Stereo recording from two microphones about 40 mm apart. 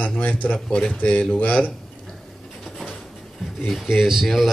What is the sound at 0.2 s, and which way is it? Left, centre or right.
Speech, left.